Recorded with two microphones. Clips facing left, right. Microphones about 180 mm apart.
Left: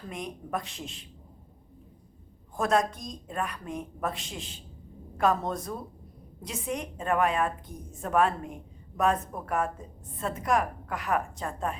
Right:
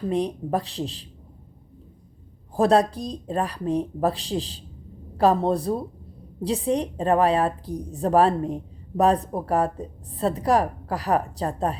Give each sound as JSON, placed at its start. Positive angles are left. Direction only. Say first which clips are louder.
{"t": 0.1, "sound": "a woman's voice", "louder": "right 9 dB", "side_deg": -35}
{"t": 2.6, "sound": "a woman's voice", "louder": "right 7 dB", "side_deg": -35}